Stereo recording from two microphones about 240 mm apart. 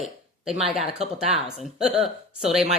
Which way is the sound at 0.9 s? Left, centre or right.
Right.